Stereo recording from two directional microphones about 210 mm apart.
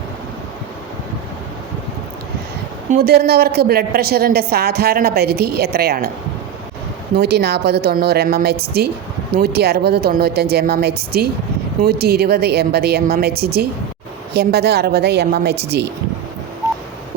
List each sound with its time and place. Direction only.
2.9 s a woman's voice: 45° right (ahead or behind)
7.2 s a woman's voice: 50° right (ahead or behind)